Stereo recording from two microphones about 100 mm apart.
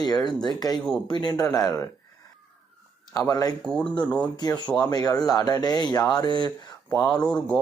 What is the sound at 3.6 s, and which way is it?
Speech, 10° left (ahead or behind).